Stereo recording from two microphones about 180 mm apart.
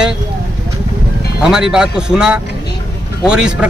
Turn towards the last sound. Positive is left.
turn(degrees=-5)  # may be behind; listen again after turning